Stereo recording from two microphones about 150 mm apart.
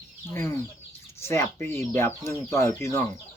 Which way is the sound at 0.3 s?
15° left (ahead or behind).